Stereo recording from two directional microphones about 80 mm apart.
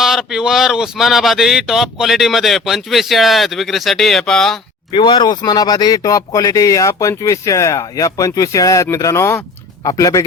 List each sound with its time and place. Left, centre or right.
0.0 s speech: centre
4.9 s speech: left
5.3 s speech: left